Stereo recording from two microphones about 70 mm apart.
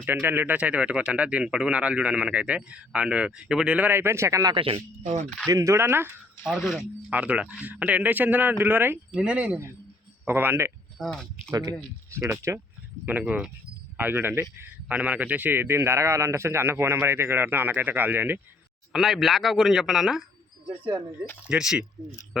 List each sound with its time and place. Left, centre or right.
0.0 s a man's voice: right
0.5 s speech: centre
3.8 s a man's voice: right
7.1 s speech: centre
9.2 s speech: centre
10.2 s a man's voice: right
10.9 s speech: centre
11.5 s speech: right
12.2 s speech: right
13.1 s a man's voice: right
18.9 s a man's voice: centre
21.5 s speech: centre